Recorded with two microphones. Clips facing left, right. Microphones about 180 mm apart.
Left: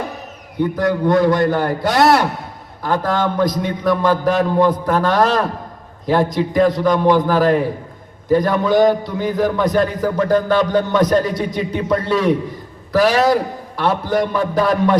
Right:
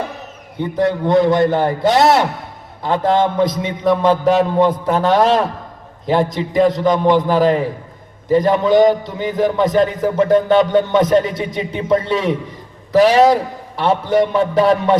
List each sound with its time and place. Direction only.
0.5 s a man's voice: 25° right (ahead or behind)
6.2 s a man's voice: centre (ahead or behind)
6.6 s a man's voice: 20° right (ahead or behind)